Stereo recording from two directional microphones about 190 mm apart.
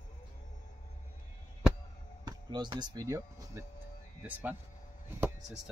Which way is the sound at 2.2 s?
20° right (ahead or behind).